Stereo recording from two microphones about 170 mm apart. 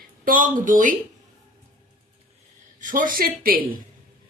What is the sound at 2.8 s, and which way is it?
Speech, 50° right (ahead or behind).